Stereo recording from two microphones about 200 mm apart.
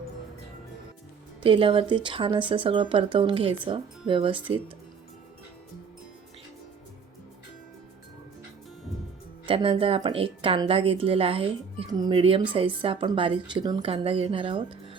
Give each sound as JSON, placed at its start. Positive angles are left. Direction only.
{"t": 1.5, "sound": "speech", "side_deg": -25}
{"t": 9.5, "sound": "speech", "side_deg": -25}